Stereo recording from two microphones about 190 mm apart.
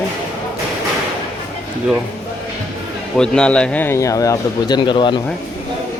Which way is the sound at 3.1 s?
5° left (ahead or behind).